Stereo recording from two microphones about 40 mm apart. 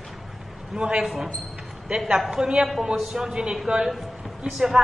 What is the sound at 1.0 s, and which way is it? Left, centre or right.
A woman's voice, centre.